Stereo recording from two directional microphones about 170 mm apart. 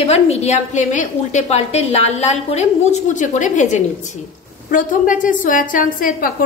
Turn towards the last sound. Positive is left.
turn(degrees=55)  # may be behind; listen again after turning